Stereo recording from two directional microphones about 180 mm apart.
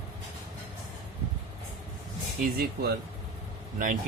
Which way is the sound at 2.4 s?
60° right (ahead or behind).